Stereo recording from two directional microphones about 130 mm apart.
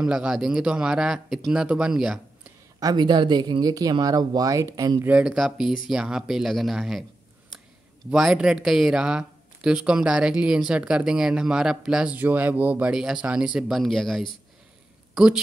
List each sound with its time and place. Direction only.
0.0 s speech: 5° right (ahead or behind)
2.8 s speech: 30° right (ahead or behind)
5.0 s speech: 10° right (ahead or behind)
8.1 s speech: 5° right (ahead or behind)